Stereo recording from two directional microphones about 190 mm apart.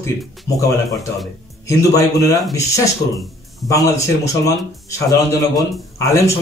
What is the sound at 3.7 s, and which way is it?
A man's voice, 15° left (ahead or behind).